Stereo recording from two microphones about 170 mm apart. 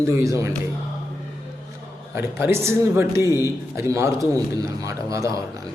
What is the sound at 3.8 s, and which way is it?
A man's voice, 15° right (ahead or behind).